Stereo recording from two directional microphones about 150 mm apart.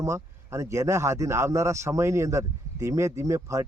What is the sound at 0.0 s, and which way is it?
Speech, 20° right (ahead or behind).